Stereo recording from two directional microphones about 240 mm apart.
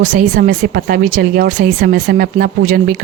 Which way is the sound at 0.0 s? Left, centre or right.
Right.